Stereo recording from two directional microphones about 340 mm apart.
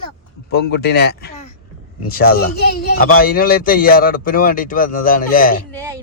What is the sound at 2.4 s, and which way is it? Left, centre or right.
Speech, left.